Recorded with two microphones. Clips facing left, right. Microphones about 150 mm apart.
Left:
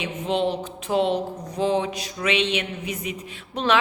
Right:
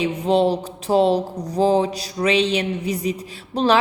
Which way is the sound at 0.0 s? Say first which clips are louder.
Right 6 dB; 35° right (ahead or behind).